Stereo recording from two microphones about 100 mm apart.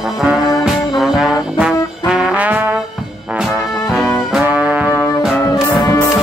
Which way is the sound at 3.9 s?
5° right (ahead or behind).